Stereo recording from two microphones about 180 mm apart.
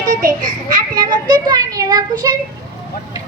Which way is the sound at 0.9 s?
25° right (ahead or behind).